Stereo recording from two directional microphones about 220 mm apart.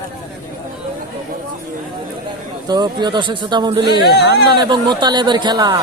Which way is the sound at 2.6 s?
20° right (ahead or behind).